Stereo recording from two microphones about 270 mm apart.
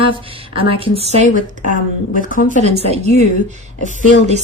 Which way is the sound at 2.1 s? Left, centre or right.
Left.